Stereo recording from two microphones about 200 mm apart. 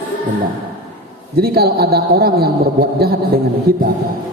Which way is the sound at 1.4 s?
50° right (ahead or behind).